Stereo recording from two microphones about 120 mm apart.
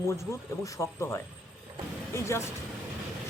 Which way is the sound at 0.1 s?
25° left (ahead or behind).